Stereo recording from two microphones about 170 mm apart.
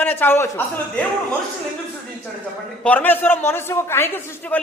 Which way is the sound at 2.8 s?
10° left (ahead or behind).